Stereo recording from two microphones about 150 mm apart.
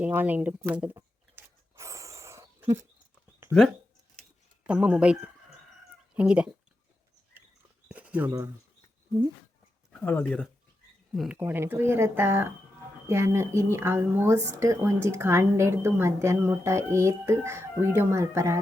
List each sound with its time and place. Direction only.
0.0 s speech: 10° right (ahead or behind)
0.7 s sigh: 10° right (ahead or behind)
4.6 s speech: 10° right (ahead or behind)
7.9 s a sound: 10° right (ahead or behind)
10.0 s speech: 10° left (ahead or behind)
11.3 s speech: 15° right (ahead or behind)